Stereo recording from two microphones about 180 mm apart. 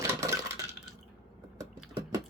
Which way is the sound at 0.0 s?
15° right (ahead or behind).